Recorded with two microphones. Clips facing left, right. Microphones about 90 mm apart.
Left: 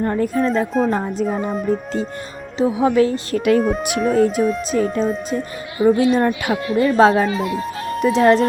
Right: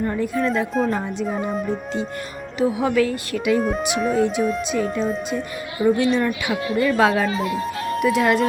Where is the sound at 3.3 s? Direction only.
50° left (ahead or behind).